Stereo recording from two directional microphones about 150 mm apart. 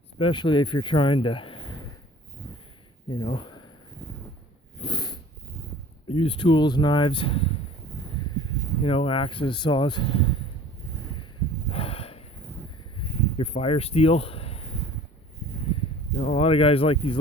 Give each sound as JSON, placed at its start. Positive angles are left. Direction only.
{"t": 0.2, "sound": "speech", "side_deg": 35}
{"t": 3.1, "sound": "speech", "side_deg": 30}
{"t": 4.8, "sound": "dog", "side_deg": 30}
{"t": 6.1, "sound": "speech", "side_deg": 40}
{"t": 8.8, "sound": "speech", "side_deg": 40}
{"t": 11.7, "sound": "snort", "side_deg": 40}
{"t": 13.0, "sound": "speech", "side_deg": 40}
{"t": 15.7, "sound": "speech", "side_deg": 45}